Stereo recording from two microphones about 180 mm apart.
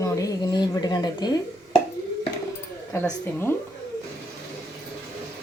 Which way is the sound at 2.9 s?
10° left (ahead or behind).